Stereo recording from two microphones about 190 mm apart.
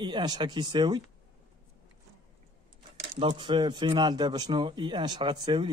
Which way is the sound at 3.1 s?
25° right (ahead or behind).